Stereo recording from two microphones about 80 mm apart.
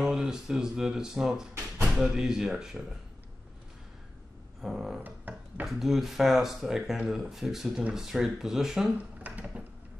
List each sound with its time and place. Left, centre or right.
0.0 s speech: centre
4.6 s music: centre
5.0 s music: right
5.7 s speech: centre
9.2 s a sound: centre